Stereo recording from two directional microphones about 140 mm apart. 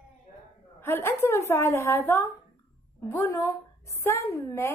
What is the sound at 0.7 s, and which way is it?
A woman's voice, 15° left (ahead or behind).